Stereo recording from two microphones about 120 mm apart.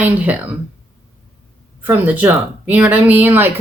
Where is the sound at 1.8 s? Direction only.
15° right (ahead or behind).